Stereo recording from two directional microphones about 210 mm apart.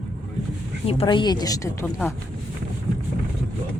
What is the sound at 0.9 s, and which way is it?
A woman's voice, 25° left (ahead or behind).